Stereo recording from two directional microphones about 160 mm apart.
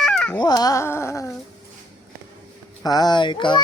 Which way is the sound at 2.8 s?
25° left (ahead or behind).